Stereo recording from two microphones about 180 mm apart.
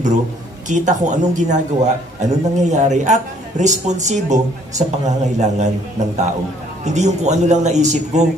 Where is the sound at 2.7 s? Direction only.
40° right (ahead or behind).